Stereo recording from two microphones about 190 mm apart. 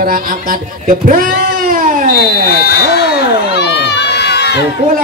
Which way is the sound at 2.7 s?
60° left (ahead or behind).